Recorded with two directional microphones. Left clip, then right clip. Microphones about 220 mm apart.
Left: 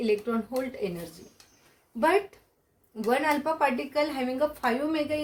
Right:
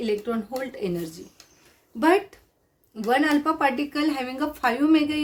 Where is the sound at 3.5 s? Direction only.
40° right (ahead or behind).